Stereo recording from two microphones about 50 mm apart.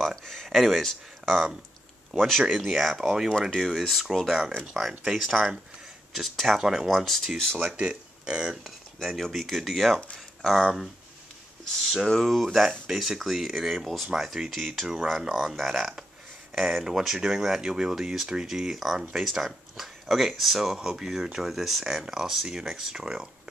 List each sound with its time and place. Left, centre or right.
0.0 s speech: centre
6.5 s speech: centre
6.9 s speech: centre
7.7 s speech: centre
8.6 s speech: centre
9.9 s speech: centre
10.5 s speech: centre